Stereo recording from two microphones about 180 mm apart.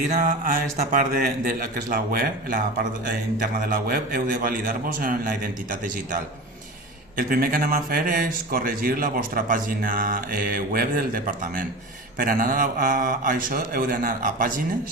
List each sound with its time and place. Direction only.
0.1 s speech: 50° right (ahead or behind)
7.2 s speech: 50° right (ahead or behind)